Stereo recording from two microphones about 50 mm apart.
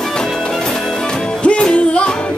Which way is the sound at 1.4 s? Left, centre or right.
Left.